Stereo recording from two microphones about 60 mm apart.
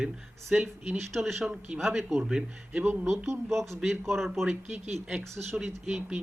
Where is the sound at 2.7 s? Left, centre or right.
Right.